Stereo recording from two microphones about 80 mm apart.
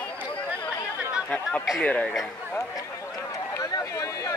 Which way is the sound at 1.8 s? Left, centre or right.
Centre.